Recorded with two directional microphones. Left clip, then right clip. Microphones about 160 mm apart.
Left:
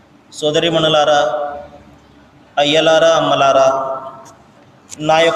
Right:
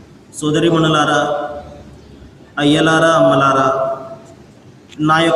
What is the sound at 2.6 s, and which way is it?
A man's voice, 35° left (ahead or behind).